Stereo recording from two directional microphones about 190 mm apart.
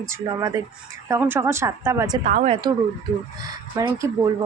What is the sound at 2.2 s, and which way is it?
Speech, 40° right (ahead or behind).